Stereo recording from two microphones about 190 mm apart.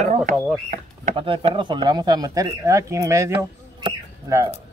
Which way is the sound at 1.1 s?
30° right (ahead or behind).